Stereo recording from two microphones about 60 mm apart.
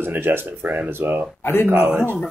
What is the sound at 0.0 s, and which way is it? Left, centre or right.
Speech, right.